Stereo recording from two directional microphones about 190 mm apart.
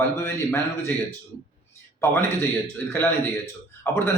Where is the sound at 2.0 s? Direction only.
10° left (ahead or behind).